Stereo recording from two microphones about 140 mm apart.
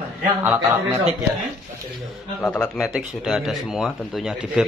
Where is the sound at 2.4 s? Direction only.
10° left (ahead or behind).